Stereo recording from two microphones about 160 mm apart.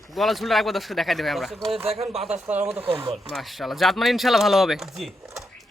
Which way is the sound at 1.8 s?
40° right (ahead or behind).